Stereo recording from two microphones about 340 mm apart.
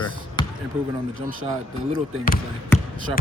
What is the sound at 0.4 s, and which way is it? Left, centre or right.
Basketball bounce, centre.